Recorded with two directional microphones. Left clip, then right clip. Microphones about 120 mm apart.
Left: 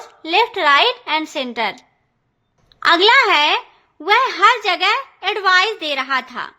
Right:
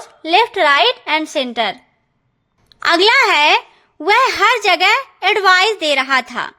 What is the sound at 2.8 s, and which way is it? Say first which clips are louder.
A woman's voice: even; 30° right (ahead or behind).